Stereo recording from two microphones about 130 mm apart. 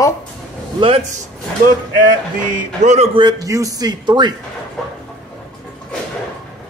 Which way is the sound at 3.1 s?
30° right (ahead or behind).